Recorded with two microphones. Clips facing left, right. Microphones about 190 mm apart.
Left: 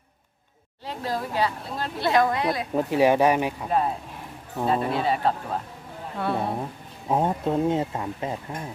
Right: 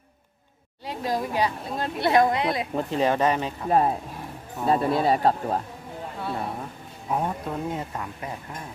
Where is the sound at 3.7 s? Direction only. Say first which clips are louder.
Right 3 dB; 45° right (ahead or behind).